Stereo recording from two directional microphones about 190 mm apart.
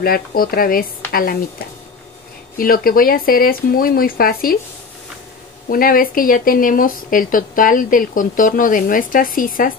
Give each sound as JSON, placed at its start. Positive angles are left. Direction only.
{"t": 0.0, "sound": "speech", "side_deg": 50}
{"t": 2.5, "sound": "speech", "side_deg": 50}
{"t": 5.7, "sound": "speech", "side_deg": 50}